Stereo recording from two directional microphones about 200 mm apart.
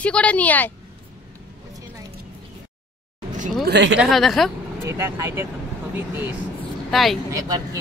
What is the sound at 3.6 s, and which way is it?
Speech, 60° right (ahead or behind).